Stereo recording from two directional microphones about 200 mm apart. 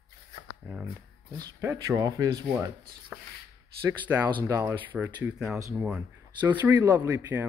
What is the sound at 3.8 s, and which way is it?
Speech, 10° right (ahead or behind).